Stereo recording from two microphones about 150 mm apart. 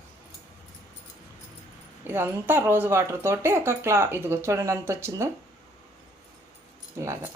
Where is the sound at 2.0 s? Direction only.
15° right (ahead or behind).